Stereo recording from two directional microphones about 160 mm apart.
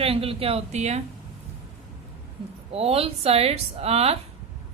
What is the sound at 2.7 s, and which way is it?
Speech, 40° right (ahead or behind).